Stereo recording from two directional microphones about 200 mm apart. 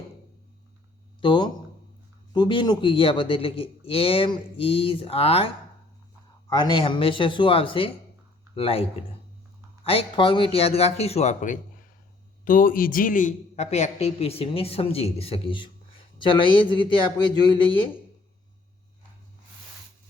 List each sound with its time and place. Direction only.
1.2 s a man's voice: 25° left (ahead or behind)
6.5 s a man's voice: 20° left (ahead or behind)